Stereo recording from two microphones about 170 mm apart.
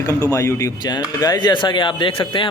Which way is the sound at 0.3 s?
15° left (ahead or behind).